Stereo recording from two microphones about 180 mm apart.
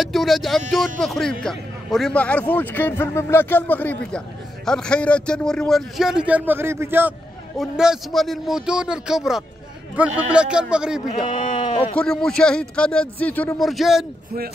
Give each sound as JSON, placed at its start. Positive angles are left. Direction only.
{"t": 0.0, "sound": "a man's voice", "side_deg": 0}
{"t": 11.5, "sound": "speech", "side_deg": 25}
{"t": 11.9, "sound": "a man's voice", "side_deg": 5}